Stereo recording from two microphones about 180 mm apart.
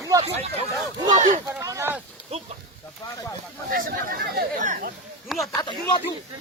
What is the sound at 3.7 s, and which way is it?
Chatter, 50° right (ahead or behind).